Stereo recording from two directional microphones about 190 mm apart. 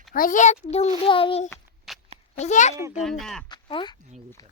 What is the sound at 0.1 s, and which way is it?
A child's voice, 45° left (ahead or behind).